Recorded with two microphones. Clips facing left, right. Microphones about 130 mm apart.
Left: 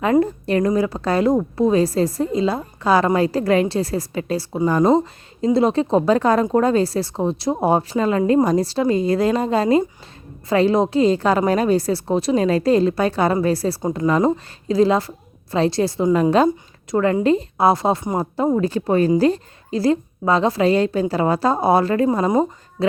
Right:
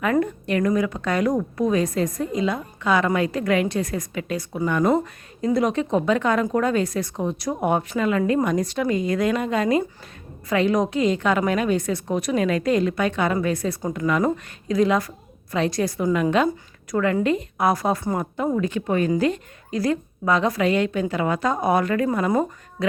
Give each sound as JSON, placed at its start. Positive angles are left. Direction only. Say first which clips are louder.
{"t": 0.0, "sound": "a woman's voice", "louder": "left 4 dB", "side_deg": 30}